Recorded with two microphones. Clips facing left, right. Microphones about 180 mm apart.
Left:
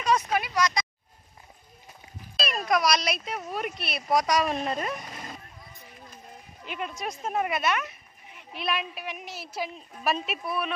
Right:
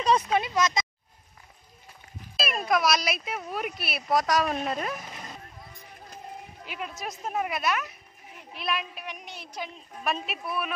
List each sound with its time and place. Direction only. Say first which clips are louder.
0.0 s speech: right 2 dB; 30° right (ahead or behind)
2.3 s a sound: even; 5° right (ahead or behind)
2.7 s speech: even; 5° right (ahead or behind)
6.6 s speech: left 3 dB; 5° right (ahead or behind)